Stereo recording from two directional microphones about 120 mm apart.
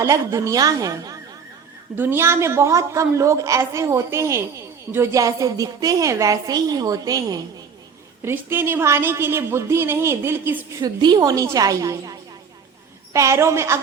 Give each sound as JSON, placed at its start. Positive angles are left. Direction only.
{"t": 0.0, "sound": "a woman's voice", "side_deg": -25}
{"t": 2.0, "sound": "a woman's voice", "side_deg": -20}
{"t": 8.2, "sound": "a woman's voice", "side_deg": -20}
{"t": 10.8, "sound": "a woman's voice", "side_deg": -35}
{"t": 13.1, "sound": "a woman's voice", "side_deg": -25}